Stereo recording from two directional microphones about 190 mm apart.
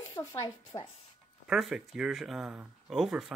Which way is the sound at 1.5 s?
Centre (ahead or behind).